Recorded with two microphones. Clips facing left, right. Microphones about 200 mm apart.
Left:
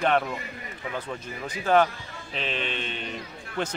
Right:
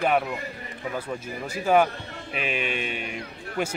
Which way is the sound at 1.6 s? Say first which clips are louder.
Right 1 dB; 10° right (ahead or behind).